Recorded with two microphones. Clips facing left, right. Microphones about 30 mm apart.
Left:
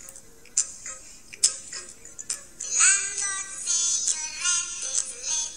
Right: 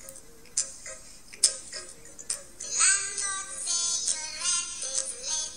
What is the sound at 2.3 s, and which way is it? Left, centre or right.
Music, right.